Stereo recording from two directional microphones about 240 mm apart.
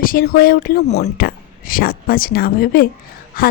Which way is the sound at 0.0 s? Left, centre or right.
Left.